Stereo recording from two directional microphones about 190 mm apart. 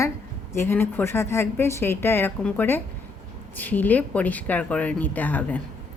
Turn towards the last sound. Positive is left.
turn(degrees=10)  # may be behind; listen again after turning